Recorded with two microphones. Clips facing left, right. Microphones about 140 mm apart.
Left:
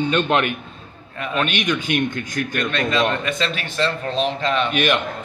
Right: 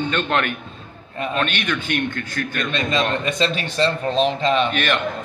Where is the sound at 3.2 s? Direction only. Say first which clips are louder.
Right 2 dB; 25° right (ahead or behind).